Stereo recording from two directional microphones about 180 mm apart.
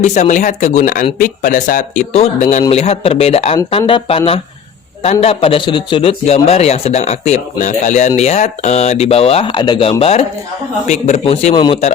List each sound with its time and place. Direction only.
0.0 s a man's voice: 40° left (ahead or behind)
11.5 s speech: 25° left (ahead or behind)